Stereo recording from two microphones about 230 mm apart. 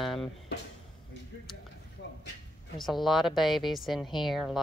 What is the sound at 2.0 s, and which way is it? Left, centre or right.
Dog, left.